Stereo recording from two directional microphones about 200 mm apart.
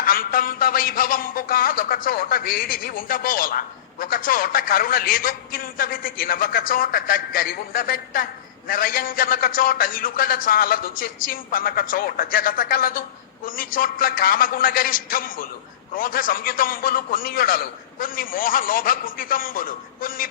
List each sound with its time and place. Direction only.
0.0 s a man's voice: 45° left (ahead or behind)